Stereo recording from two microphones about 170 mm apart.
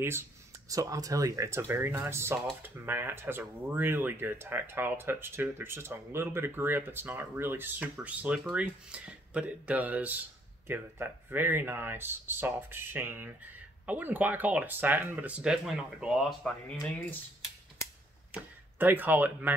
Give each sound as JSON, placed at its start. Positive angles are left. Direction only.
{"t": 0.7, "sound": "speech", "side_deg": -20}
{"t": 18.3, "sound": "speech", "side_deg": -10}